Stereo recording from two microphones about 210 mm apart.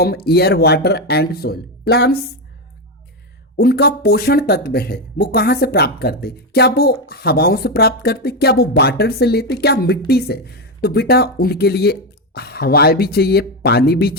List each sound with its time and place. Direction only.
0.0 s speech: 50° left (ahead or behind)
3.6 s speech: 50° left (ahead or behind)